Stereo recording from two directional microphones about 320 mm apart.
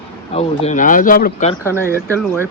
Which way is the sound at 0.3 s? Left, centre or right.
Left.